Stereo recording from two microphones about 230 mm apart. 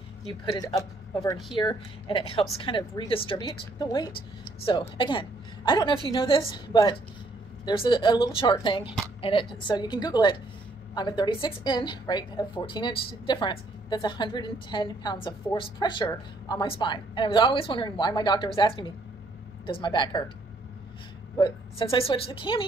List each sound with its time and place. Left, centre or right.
0.3 s a woman's voice: centre
21.4 s a woman's voice: left